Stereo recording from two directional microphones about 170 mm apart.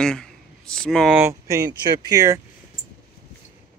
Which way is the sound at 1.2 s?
20° right (ahead or behind).